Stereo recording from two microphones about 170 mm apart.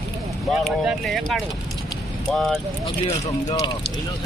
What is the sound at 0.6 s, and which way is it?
Speech, centre (ahead or behind).